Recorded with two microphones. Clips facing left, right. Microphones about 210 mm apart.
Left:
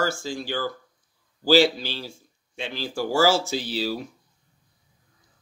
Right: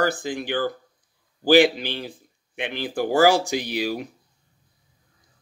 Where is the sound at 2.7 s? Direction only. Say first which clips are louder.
Right 3 dB; 55° right (ahead or behind).